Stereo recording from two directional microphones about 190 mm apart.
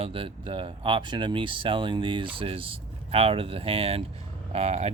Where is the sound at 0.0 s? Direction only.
30° right (ahead or behind).